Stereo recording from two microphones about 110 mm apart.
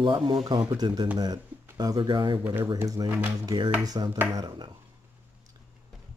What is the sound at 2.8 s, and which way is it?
Speech, 30° right (ahead or behind).